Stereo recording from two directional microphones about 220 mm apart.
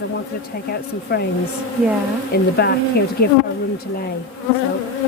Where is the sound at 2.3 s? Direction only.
45° left (ahead or behind).